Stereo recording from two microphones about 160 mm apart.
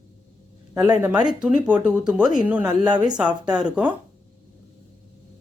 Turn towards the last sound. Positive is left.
turn(degrees=-10)  # may be behind; listen again after turning